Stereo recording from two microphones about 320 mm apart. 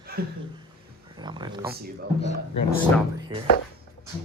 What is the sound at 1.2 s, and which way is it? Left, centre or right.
Speech, centre.